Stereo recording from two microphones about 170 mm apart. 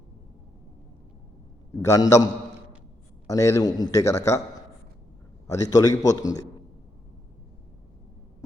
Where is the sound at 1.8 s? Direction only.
20° left (ahead or behind).